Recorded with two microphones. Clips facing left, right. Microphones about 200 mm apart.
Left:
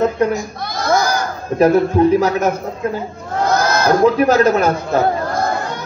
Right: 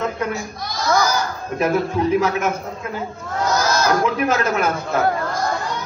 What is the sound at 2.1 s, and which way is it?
Speech, 35° left (ahead or behind).